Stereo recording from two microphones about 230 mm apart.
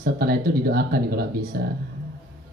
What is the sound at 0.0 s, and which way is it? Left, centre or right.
Speech, right.